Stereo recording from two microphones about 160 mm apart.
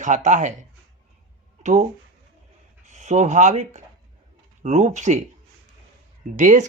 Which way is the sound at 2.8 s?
45° right (ahead or behind).